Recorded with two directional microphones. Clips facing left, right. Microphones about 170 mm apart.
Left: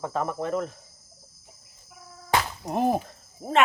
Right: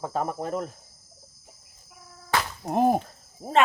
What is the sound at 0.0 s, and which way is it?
Cricket, 35° right (ahead or behind).